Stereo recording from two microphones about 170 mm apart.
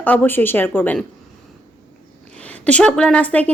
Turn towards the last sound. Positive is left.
turn(degrees=10)  # may be behind; listen again after turning